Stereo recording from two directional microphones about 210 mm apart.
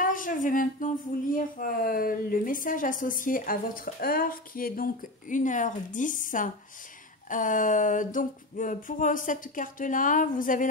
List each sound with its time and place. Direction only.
0.0 s speech: 40° left (ahead or behind)